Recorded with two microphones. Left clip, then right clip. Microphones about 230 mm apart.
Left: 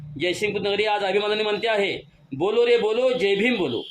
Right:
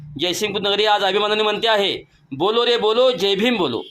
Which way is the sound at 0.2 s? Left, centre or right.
Centre.